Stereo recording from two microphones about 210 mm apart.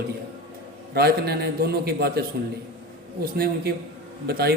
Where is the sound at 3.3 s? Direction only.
45° right (ahead or behind).